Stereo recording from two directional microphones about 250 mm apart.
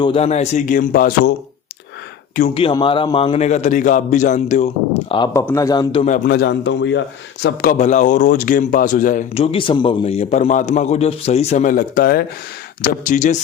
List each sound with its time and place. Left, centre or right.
0.0 s speech: left
2.3 s a man's voice: left
6.2 s a man's voice: left
7.4 s a man's voice: left